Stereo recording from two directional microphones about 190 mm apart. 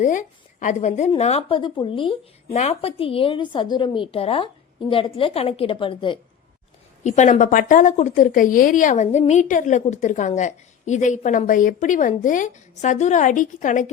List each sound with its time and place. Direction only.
0.0 s a woman's voice: 40° left (ahead or behind)
7.0 s a woman's voice: 40° left (ahead or behind)